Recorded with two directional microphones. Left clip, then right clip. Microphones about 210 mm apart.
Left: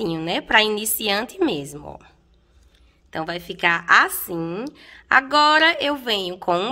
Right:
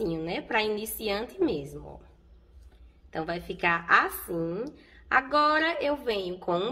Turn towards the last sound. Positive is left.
turn(degrees=45)  # may be behind; listen again after turning